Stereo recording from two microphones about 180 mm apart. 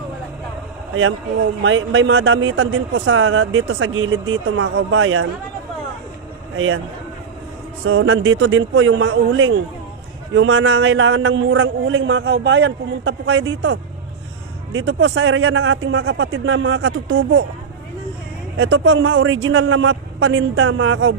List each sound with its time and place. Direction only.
1.6 s a man's voice: 90° right
7.9 s a man's voice: 75° right (ahead or behind)
18.5 s a man's voice: 80° right